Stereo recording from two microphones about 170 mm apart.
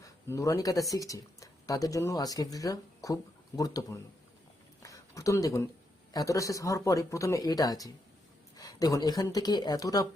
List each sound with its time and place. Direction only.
0.0 s speech: 20° left (ahead or behind)
4.8 s a sound: 20° left (ahead or behind)
6.1 s speech: 20° left (ahead or behind)